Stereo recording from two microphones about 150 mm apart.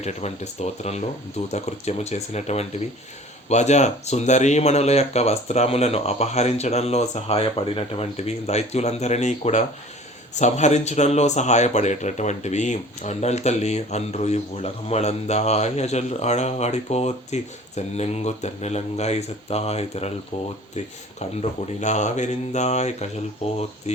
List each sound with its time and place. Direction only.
0.0 s speech: 45° left (ahead or behind)